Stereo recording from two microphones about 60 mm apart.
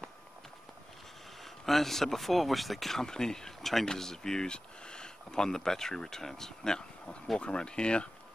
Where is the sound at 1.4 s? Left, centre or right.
Centre.